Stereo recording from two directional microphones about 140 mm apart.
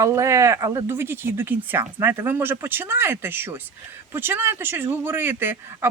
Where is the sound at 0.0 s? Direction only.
20° right (ahead or behind).